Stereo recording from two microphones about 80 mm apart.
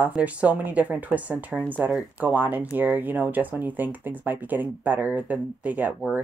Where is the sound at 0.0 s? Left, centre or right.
Centre.